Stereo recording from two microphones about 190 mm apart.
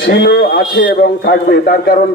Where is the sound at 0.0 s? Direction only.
75° left (ahead or behind).